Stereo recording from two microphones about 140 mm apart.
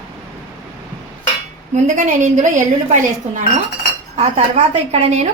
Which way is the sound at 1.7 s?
60° right (ahead or behind).